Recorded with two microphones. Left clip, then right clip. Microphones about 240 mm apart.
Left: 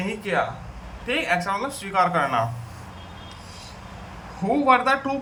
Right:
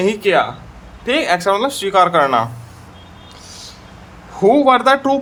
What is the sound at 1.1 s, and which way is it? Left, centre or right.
Speech, right.